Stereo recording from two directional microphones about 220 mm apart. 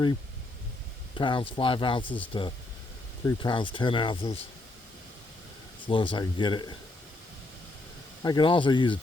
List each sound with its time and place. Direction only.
1.1 s speech: 20° left (ahead or behind)
5.9 s speech: 20° left (ahead or behind)
8.2 s speech: 20° left (ahead or behind)